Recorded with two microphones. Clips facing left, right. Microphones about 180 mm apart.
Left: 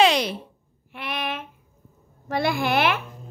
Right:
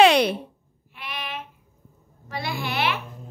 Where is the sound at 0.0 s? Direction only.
60° right (ahead or behind).